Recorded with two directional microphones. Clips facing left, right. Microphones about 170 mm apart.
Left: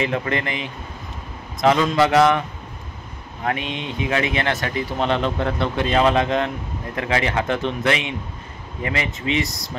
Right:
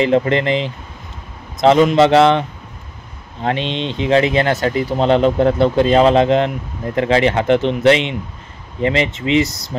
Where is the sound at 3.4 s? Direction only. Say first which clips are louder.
Right 5 dB; 25° right (ahead or behind).